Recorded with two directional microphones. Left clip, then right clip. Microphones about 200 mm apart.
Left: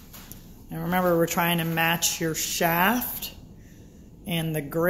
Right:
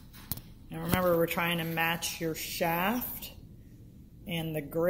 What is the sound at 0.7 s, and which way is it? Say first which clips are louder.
Speech: left 4 dB; 20° left (ahead or behind).